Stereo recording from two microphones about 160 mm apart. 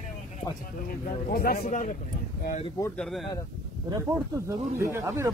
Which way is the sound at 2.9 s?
5° left (ahead or behind).